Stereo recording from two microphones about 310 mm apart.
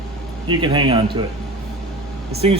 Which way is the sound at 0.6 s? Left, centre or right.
Centre.